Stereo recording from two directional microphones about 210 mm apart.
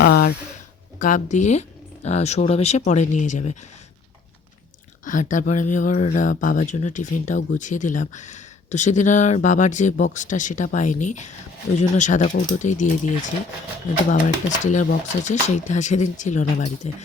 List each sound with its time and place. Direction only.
0.0 s a sound: 50° left (ahead or behind)
0.9 s speech: 40° left (ahead or behind)
5.0 s speech: 35° left (ahead or behind)
14.6 s speech: 35° left (ahead or behind)